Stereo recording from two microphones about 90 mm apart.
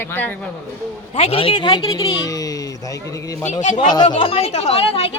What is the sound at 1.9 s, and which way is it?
Speech, 45° left (ahead or behind).